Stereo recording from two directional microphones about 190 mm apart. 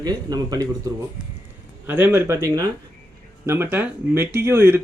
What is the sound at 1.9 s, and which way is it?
A man's voice, 10° right (ahead or behind).